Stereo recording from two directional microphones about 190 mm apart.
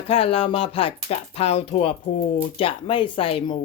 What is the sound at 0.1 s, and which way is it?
Speech, 30° left (ahead or behind).